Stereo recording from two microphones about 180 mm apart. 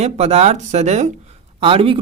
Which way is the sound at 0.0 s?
35° right (ahead or behind).